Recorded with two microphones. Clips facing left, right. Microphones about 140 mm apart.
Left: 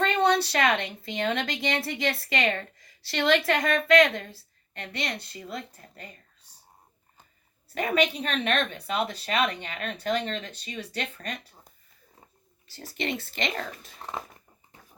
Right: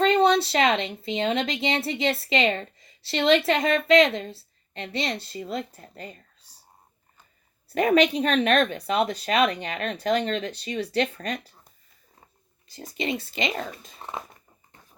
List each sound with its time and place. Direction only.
0.0 s a woman's voice: 25° right (ahead or behind)
7.8 s speech: 40° right (ahead or behind)
12.7 s speech: centre (ahead or behind)